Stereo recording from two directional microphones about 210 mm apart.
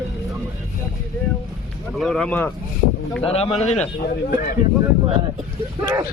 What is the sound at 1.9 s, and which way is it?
Speech, centre (ahead or behind).